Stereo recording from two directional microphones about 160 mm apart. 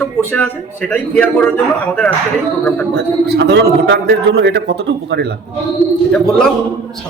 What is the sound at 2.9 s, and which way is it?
A man's voice, 90° right.